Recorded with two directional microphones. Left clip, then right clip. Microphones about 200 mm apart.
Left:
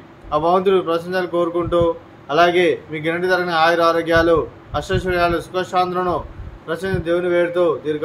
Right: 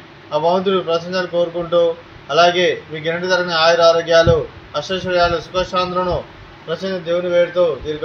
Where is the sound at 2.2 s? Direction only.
45° left (ahead or behind).